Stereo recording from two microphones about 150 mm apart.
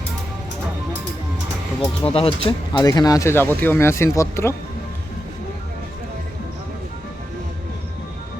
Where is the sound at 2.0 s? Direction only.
40° left (ahead or behind); by 4.5 s 20° left (ahead or behind).